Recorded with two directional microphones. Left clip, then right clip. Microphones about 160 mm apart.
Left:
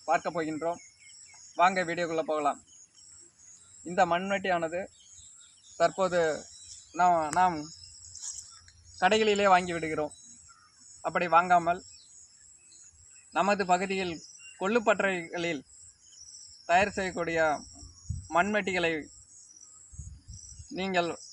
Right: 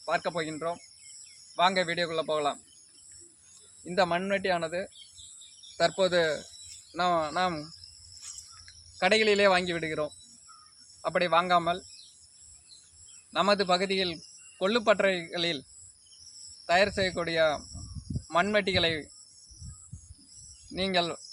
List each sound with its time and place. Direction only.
0.0 s speech: 25° right (ahead or behind)
3.8 s a man's voice: 25° right (ahead or behind)
9.0 s a man's voice: 30° right (ahead or behind)
13.3 s speech: 25° right (ahead or behind)
16.6 s speech: 25° right (ahead or behind)
20.7 s speech: 25° right (ahead or behind)